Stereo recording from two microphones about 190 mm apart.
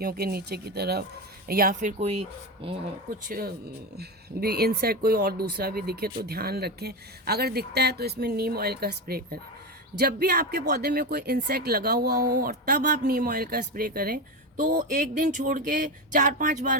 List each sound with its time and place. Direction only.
0.0 s speech: 55° right (ahead or behind); by 2.8 s 30° right (ahead or behind)
3.2 s speech: 50° right (ahead or behind)